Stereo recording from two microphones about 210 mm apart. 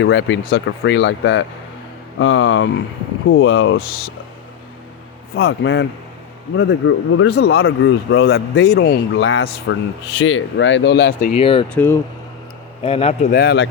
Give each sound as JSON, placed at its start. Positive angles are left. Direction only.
{"t": 0.0, "sound": "speech", "side_deg": 60}
{"t": 5.5, "sound": "speech", "side_deg": 60}
{"t": 7.6, "sound": "speech", "side_deg": 75}
{"t": 8.7, "sound": "speech", "side_deg": 45}
{"t": 11.2, "sound": "speech", "side_deg": 30}
{"t": 11.7, "sound": "speech", "side_deg": 10}
{"t": 12.8, "sound": "speech", "side_deg": 30}
{"t": 13.3, "sound": "speech", "side_deg": 50}